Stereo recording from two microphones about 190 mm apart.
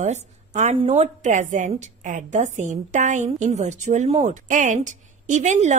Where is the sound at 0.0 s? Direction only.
35° right (ahead or behind).